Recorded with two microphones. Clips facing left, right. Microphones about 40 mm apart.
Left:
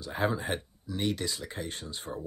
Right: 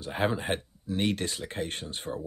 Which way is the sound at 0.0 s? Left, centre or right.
Right.